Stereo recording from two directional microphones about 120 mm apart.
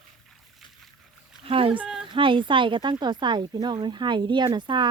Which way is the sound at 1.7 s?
5° right (ahead or behind).